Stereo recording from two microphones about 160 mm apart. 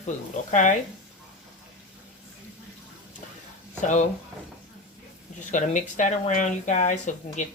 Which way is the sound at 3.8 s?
50° left (ahead or behind).